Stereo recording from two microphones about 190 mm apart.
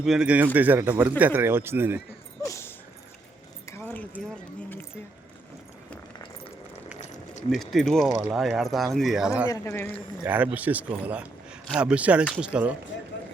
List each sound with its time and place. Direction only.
0.0 s speech: 5° right (ahead or behind)
2.5 s dog: 15° left (ahead or behind)
3.7 s a sound: 10° left (ahead or behind)
7.5 s speech: centre (ahead or behind)
9.5 s speech: 15° left (ahead or behind)
10.2 s speech: 10° right (ahead or behind)
12.9 s speech: 70° left (ahead or behind)